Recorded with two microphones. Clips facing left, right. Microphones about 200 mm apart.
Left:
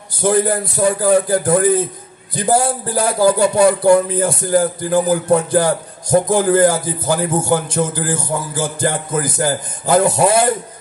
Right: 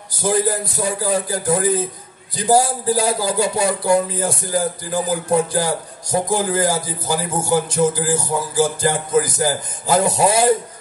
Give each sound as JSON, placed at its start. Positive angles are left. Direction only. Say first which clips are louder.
{"t": 0.2, "sound": "speech", "louder": "left 3 dB", "side_deg": 60}